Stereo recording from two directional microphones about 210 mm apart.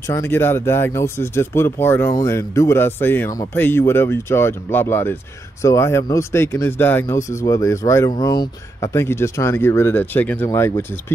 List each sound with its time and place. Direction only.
0.1 s speech: 10° left (ahead or behind)